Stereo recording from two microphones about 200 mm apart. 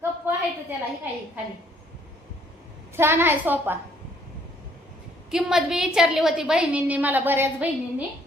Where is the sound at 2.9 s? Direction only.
10° right (ahead or behind).